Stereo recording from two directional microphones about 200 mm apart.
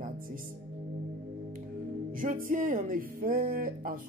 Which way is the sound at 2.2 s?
45° right (ahead or behind).